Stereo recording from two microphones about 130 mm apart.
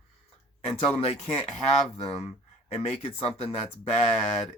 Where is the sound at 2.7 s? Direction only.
55° left (ahead or behind).